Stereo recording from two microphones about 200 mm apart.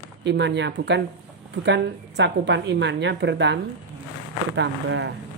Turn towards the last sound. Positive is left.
turn(degrees=-60)  # may be behind; listen again after turning